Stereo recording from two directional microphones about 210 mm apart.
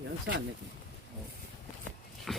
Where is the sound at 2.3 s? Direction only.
Centre (ahead or behind).